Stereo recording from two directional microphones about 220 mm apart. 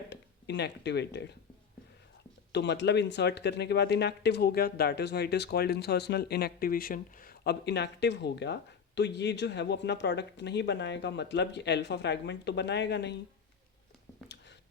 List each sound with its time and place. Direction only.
0.1 s speech: 50° left (ahead or behind)
2.5 s speech: 50° left (ahead or behind)